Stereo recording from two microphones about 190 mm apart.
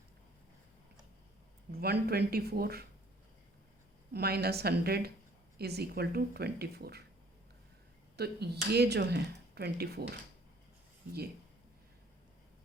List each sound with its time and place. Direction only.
1.7 s speech: 55° right (ahead or behind)
4.1 s speech: 55° right (ahead or behind)
8.1 s speech: 60° right (ahead or behind)